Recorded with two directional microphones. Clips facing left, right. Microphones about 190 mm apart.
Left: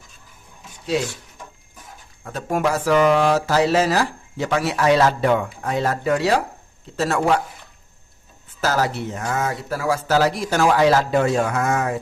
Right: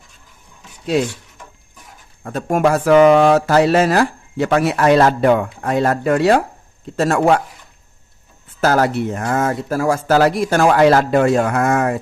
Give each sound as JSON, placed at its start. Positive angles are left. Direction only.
{"t": 2.2, "sound": "speech", "side_deg": -50}
{"t": 8.6, "sound": "speech", "side_deg": -55}